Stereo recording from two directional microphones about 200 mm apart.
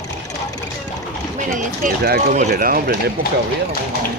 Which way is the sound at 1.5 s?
45° right (ahead or behind).